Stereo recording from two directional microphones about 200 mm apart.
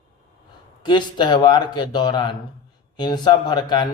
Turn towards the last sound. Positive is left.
turn(degrees=20)  # may be behind; listen again after turning